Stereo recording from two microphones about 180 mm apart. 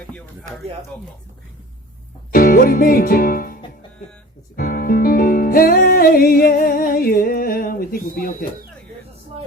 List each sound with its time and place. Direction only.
0.9 s speech: 10° left (ahead or behind)
2.3 s music: 55° left (ahead or behind)